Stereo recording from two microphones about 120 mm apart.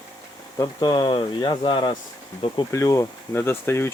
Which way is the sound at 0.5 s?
35° left (ahead or behind).